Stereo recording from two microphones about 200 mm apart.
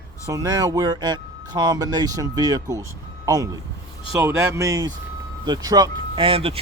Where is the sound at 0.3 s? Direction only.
15° right (ahead or behind).